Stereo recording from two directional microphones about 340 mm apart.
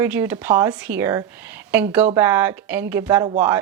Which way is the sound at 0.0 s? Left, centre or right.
Centre.